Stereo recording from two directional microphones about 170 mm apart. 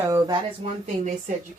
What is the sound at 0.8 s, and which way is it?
Speech, 45° right (ahead or behind).